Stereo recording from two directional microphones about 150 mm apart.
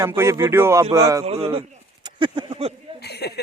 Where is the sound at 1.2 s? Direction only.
40° right (ahead or behind).